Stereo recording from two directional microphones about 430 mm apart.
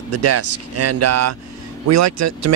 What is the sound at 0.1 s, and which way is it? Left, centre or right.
Speech, right.